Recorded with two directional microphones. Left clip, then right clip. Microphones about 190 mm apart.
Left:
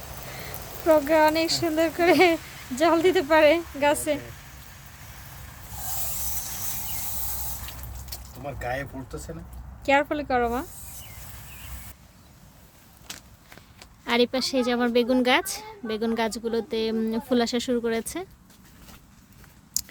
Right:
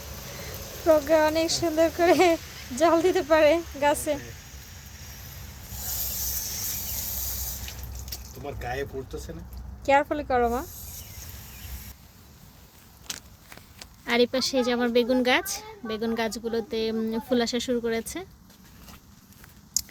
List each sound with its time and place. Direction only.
0.9 s speech: 10° left (ahead or behind)
8.5 s speech: 30° left (ahead or behind)
9.8 s speech: 5° left (ahead or behind)
14.0 s speech: 20° left (ahead or behind)
19.8 s chewing: 35° left (ahead or behind)